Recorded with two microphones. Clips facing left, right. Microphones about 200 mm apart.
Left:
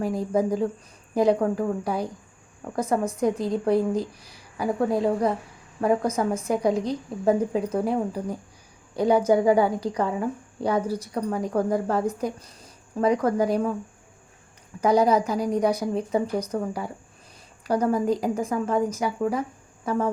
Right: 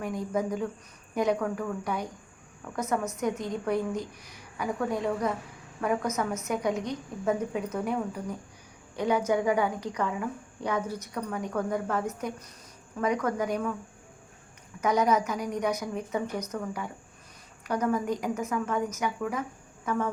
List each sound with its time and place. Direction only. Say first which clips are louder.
0.0 s a woman's voice: left 6 dB; 30° left (ahead or behind)
14.8 s a woman's voice: left 5 dB; 30° left (ahead or behind)